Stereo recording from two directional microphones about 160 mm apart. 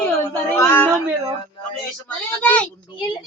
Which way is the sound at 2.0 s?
10° left (ahead or behind).